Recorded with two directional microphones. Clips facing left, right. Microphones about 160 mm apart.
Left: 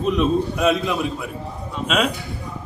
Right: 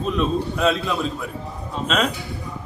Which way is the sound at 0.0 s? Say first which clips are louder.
Left 3 dB; 15° left (ahead or behind).